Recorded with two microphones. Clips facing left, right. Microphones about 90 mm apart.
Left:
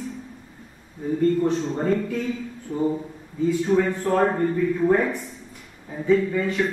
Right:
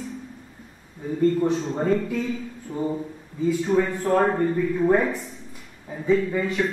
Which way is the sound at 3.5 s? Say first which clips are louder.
Left 1 dB; 15° right (ahead or behind).